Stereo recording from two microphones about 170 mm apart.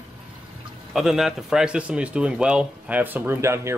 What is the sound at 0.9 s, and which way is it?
Speech, centre (ahead or behind).